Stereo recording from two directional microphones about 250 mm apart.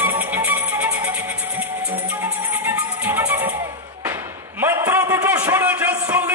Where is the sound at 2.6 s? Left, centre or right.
Centre.